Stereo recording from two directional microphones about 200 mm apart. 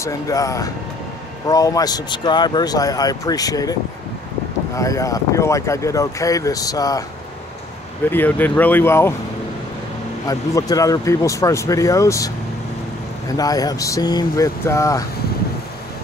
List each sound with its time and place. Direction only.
0.0 s speech: 15° left (ahead or behind)
4.7 s speech: 15° left (ahead or behind)
8.1 s speech: 10° left (ahead or behind)
10.2 s speech: 15° left (ahead or behind)
13.4 s speech: 20° left (ahead or behind)